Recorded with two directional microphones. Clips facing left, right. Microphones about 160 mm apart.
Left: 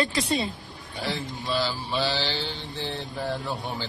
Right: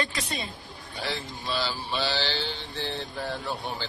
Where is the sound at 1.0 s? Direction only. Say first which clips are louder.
Left 3 dB; centre (ahead or behind).